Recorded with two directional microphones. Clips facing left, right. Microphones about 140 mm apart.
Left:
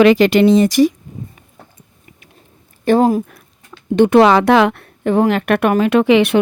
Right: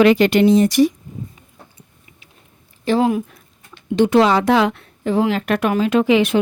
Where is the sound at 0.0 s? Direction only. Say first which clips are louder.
Left 3 dB; 90° left.